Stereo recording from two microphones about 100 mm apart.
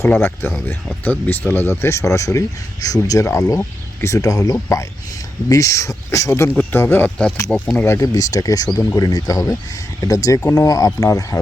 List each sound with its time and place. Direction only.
0.2 s speech: 25° left (ahead or behind)
7.8 s speech: 30° left (ahead or behind)